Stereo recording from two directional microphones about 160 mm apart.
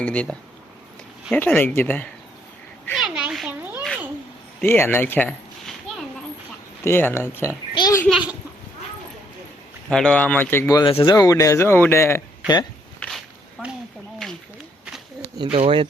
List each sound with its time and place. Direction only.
0.0 s speech: 10° left (ahead or behind)
2.9 s a child's voice: 5° right (ahead or behind)
4.6 s speech: 15° left (ahead or behind)
6.8 s speech: 15° left (ahead or behind)
7.7 s a sound: 25° left (ahead or behind)
9.9 s speech: 5° left (ahead or behind)
10.8 s speech: 30° left (ahead or behind); by 12.2 s 15° left (ahead or behind)
13.0 s walk: centre (ahead or behind)
15.5 s speech: 35° right (ahead or behind)